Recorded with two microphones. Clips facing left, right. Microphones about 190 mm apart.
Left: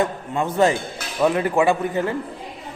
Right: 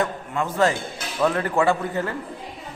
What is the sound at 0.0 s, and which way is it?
A man's voice, 20° left (ahead or behind).